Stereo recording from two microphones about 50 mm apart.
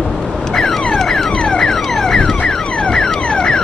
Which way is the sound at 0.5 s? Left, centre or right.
Centre.